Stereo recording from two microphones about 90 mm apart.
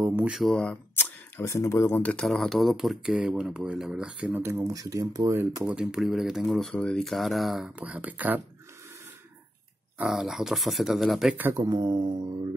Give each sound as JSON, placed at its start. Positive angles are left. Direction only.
{"t": 0.0, "sound": "speech", "side_deg": -20}
{"t": 0.5, "sound": "speech", "side_deg": 10}
{"t": 0.9, "sound": "camera", "side_deg": 25}
{"t": 1.5, "sound": "speech", "side_deg": 35}
{"t": 2.0, "sound": "speech", "side_deg": 5}
{"t": 4.4, "sound": "speech", "side_deg": -30}
{"t": 5.3, "sound": "speech", "side_deg": -20}
{"t": 7.8, "sound": "speech", "side_deg": -15}
{"t": 10.0, "sound": "speech", "side_deg": -5}
{"t": 11.5, "sound": "speech", "side_deg": -35}
{"t": 11.8, "sound": "speech", "side_deg": -60}